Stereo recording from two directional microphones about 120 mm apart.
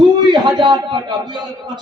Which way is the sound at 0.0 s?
35° right (ahead or behind).